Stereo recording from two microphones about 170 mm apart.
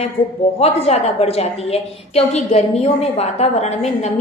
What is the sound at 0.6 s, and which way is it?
A woman's voice, 35° left (ahead or behind).